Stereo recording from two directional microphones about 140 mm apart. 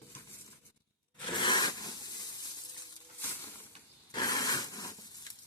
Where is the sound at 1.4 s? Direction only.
30° left (ahead or behind).